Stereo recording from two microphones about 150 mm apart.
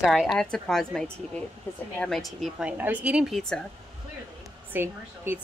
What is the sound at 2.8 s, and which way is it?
Speech, 10° right (ahead or behind).